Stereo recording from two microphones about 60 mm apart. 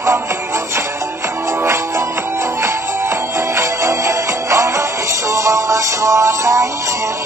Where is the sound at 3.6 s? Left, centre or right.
Right.